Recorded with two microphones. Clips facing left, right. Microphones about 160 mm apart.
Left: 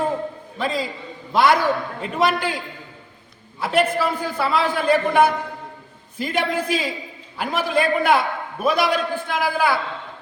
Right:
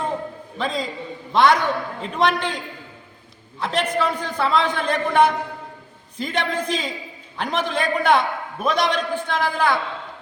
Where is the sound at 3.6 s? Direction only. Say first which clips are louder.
Left 2 dB; 5° left (ahead or behind).